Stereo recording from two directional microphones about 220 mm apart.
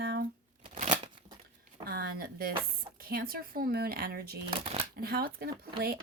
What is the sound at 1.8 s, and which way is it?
Speech, 45° right (ahead or behind).